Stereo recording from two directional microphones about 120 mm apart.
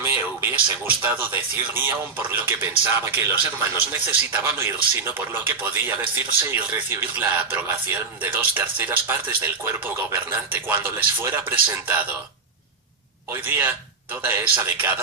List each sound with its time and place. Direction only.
0.0 s a man's voice: 20° right (ahead or behind)
13.3 s a man's voice: 15° right (ahead or behind)